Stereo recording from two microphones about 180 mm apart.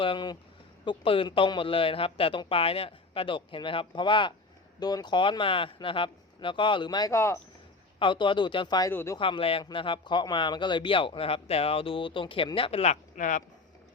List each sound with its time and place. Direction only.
0.0 s speech: 25° left (ahead or behind)
7.9 s speech: 25° left (ahead or behind)
8.9 s speech: 10° left (ahead or behind)
9.1 s speech: 30° left (ahead or behind); by 13.4 s 45° left (ahead or behind)